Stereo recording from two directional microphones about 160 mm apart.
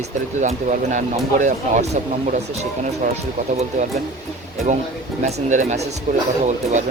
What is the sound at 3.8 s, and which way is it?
Speech, 45° right (ahead or behind).